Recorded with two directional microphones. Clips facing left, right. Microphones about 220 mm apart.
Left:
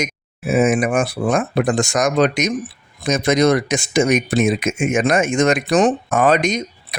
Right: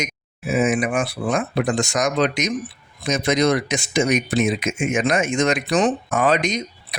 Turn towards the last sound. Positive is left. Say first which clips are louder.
# left 3 dB
turn(degrees=50)  # may be behind; listen again after turning